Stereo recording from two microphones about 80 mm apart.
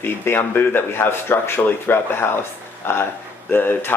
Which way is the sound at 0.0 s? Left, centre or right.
Left.